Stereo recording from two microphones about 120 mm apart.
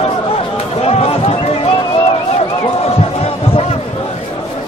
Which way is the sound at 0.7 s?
55° left (ahead or behind).